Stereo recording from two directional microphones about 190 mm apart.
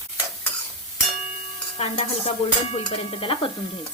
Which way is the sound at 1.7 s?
35° left (ahead or behind).